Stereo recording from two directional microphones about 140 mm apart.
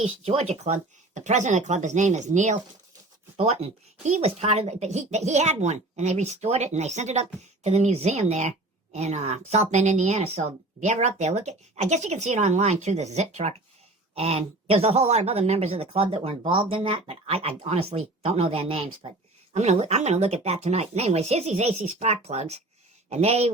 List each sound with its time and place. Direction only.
0.0 s speech: 45° right (ahead or behind)
3.3 s a woman's voice: 50° right (ahead or behind)
19.5 s a woman's voice: 55° right (ahead or behind)